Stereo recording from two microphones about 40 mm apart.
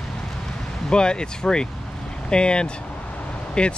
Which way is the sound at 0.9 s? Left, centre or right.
Left.